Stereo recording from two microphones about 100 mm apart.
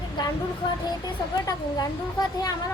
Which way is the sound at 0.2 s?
50° left (ahead or behind).